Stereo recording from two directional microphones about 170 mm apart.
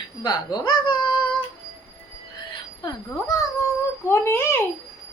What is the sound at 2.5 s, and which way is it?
Music, 25° left (ahead or behind).